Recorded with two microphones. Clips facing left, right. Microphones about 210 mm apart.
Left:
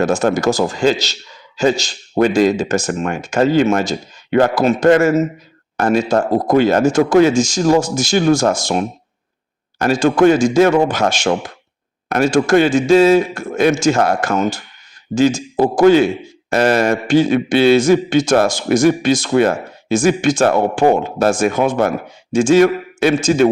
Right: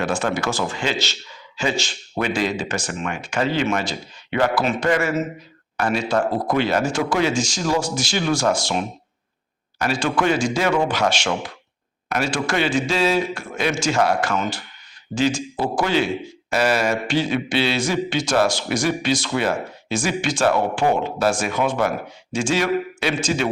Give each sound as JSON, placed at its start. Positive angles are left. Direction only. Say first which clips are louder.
{"t": 0.0, "sound": "a man's voice", "louder": "left 8 dB", "side_deg": 40}